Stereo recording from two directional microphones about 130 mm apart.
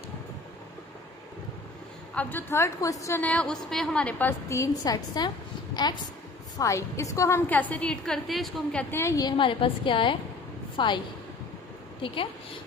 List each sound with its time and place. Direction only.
2.1 s a woman's voice: 15° left (ahead or behind)
3.2 s a woman's voice: 10° left (ahead or behind); by 6.0 s 35° left (ahead or behind)
6.6 s a woman's voice: 25° left (ahead or behind)
9.4 s a woman's voice: 40° left (ahead or behind)
12.0 s a woman's voice: 40° left (ahead or behind)